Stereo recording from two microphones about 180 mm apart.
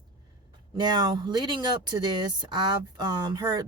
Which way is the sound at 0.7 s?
25° right (ahead or behind).